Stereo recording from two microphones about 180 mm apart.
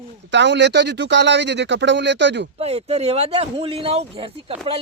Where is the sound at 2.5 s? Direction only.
35° right (ahead or behind).